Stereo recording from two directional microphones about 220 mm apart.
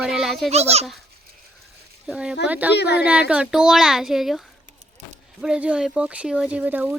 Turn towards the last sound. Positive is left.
turn(degrees=-10)  # may be behind; listen again after turning